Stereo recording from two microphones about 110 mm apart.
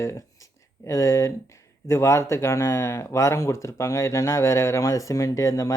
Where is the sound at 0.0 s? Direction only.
30° left (ahead or behind).